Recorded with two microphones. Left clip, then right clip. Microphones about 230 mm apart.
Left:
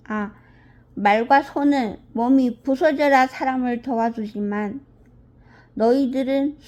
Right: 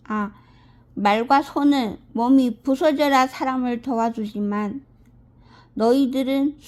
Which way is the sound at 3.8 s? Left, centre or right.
Right.